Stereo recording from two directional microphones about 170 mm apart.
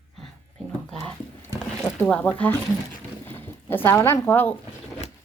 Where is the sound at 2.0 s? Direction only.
10° left (ahead or behind).